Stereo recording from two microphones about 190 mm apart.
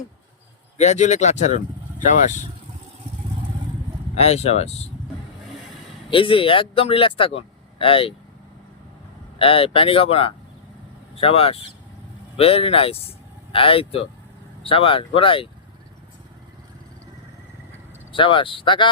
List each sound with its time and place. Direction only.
0.8 s speech: 40° left (ahead or behind)
4.1 s speech: 35° left (ahead or behind)
6.1 s speech: 25° left (ahead or behind)
9.4 s speech: 30° left (ahead or behind)
18.1 s speech: 25° left (ahead or behind)